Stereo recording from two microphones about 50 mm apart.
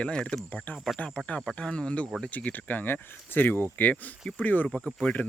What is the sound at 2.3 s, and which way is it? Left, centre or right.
Speech, left.